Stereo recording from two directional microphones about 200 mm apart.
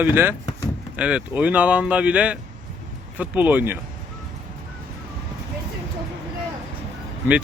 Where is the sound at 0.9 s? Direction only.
5° right (ahead or behind).